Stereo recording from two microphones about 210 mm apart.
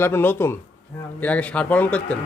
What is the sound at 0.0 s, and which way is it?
Speech, 10° left (ahead or behind).